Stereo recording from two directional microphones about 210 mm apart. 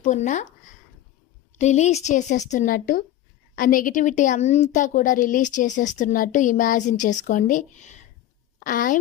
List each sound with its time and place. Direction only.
0.0 s speech: 35° left (ahead or behind)
1.5 s a woman's voice: 35° left (ahead or behind)